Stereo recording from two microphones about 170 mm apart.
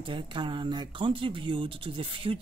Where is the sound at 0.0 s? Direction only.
30° right (ahead or behind).